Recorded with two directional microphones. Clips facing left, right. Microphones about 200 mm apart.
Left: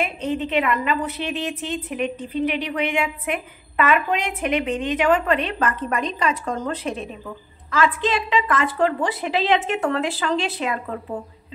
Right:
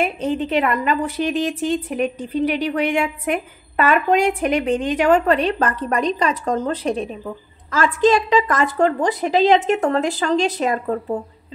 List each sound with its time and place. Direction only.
0.0 s a woman's voice: 40° right (ahead or behind)